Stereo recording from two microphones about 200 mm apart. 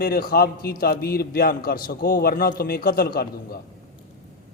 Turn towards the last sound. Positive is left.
turn(degrees=50)  # may be behind; listen again after turning